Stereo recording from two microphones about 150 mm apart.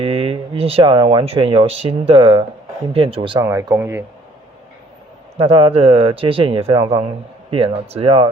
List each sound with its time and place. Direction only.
0.0 s speech: 40° right (ahead or behind); by 4.0 s 15° right (ahead or behind)
5.4 s speech: 35° right (ahead or behind)